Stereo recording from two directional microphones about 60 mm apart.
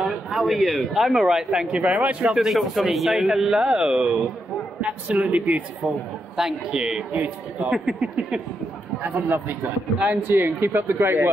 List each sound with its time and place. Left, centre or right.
0.0 s speech: centre
1.8 s speech: right
2.3 s speech: centre; by 5.6 s right
6.3 s speech: centre
7.1 s speech: right
9.1 s speech: right